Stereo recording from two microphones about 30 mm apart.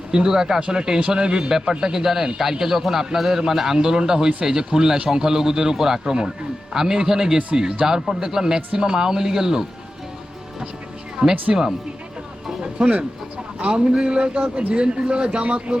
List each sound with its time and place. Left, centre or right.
0.1 s a man's voice: right
1.8 s a man's voice: centre
11.2 s speech: right
12.8 s speech: right